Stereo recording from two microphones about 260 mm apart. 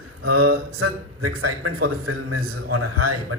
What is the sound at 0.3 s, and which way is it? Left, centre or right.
Mantra, right.